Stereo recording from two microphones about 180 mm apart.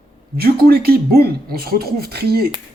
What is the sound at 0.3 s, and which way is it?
Speech, 60° right (ahead or behind).